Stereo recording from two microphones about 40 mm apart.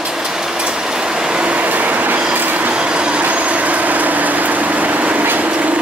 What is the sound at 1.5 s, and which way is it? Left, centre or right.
Train, right.